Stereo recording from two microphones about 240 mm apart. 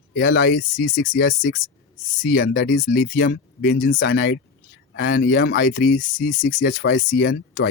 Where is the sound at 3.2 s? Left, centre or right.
Left.